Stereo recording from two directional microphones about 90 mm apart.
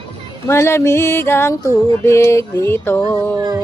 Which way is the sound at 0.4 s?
30° left (ahead or behind).